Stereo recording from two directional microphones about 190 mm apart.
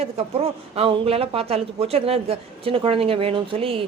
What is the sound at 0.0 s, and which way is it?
Speech, 30° right (ahead or behind).